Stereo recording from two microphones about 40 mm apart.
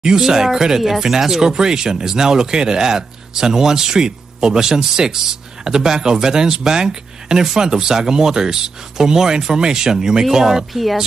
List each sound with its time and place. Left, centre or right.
0.0 s speech: centre
10.7 s speech: centre